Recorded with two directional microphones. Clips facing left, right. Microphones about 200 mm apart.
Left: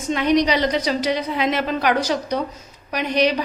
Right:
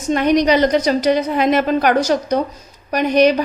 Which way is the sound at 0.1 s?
50° right (ahead or behind).